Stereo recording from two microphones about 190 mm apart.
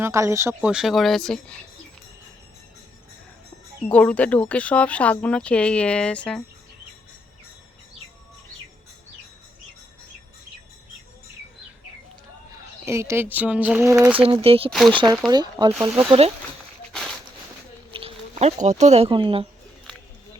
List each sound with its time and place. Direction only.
0.0 s speech: 15° right (ahead or behind); by 1.6 s 5° left (ahead or behind)
3.8 s speech: 5° left (ahead or behind)
12.8 s speech: 15° right (ahead or behind)
14.2 s speech: 30° right (ahead or behind)
14.7 s speech: centre (ahead or behind)
14.9 s speech: 20° right (ahead or behind)
16.9 s a sound: 5° left (ahead or behind)
17.9 s speech: 30° right (ahead or behind)